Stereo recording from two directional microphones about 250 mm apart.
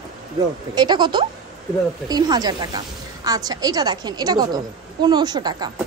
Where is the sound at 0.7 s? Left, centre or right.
Centre.